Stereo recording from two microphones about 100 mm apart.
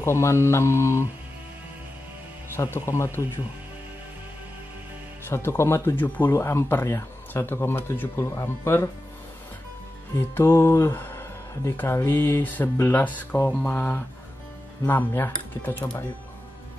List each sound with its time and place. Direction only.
0.0 s speech: 30° left (ahead or behind)
2.5 s speech: 25° left (ahead or behind)
5.3 s speech: 25° left (ahead or behind)
10.1 s speech: 25° left (ahead or behind)